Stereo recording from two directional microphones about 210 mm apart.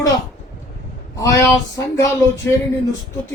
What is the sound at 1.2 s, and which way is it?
Speech, 15° left (ahead or behind).